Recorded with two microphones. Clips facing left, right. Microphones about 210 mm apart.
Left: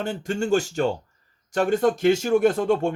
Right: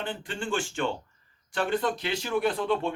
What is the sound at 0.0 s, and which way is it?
Speech, 45° left (ahead or behind).